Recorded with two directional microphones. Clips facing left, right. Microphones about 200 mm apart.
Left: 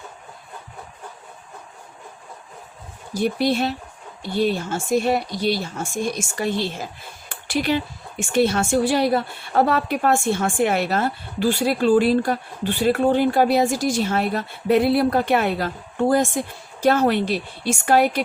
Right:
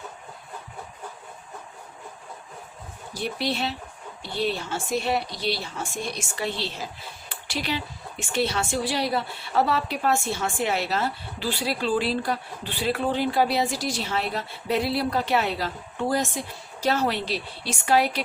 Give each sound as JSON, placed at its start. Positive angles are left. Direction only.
{"t": 3.2, "sound": "speech", "side_deg": 45}